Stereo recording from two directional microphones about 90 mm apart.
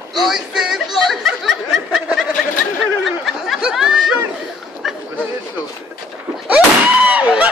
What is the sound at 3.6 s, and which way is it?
Chatter, 5° right (ahead or behind).